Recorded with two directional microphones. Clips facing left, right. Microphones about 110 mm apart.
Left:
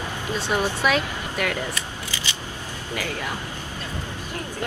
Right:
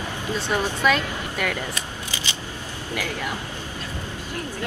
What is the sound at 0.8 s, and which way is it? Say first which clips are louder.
Speech: right 1 dB; centre (ahead or behind).